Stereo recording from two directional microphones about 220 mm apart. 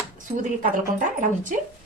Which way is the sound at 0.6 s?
35° right (ahead or behind).